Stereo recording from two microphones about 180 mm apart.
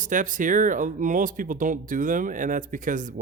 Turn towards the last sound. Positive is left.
turn(degrees=-45)  # may be behind; listen again after turning